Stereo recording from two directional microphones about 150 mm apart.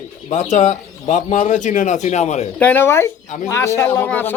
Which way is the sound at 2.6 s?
10° left (ahead or behind).